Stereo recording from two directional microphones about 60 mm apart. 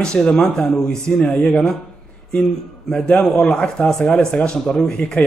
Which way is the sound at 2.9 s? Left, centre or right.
Centre.